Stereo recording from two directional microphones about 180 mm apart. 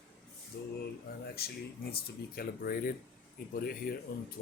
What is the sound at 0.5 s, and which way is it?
Speech, 60° left (ahead or behind).